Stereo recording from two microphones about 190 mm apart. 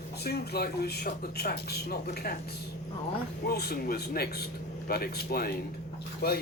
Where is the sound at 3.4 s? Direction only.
55° left (ahead or behind).